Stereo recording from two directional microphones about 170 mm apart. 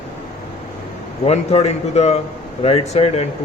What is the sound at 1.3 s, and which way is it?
Speech, 40° left (ahead or behind).